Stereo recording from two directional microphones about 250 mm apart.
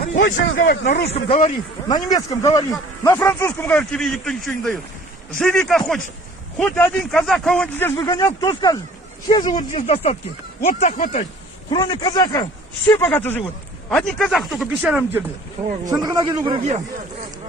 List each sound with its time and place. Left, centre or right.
0.0 s a sound: left
0.3 s speech: left
1.1 s speech: left
9.6 s speech: left
11.7 s speech: centre
15.9 s a man's voice: centre